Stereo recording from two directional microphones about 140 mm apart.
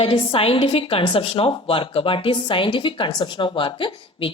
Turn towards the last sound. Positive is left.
turn(degrees=35)  # may be behind; listen again after turning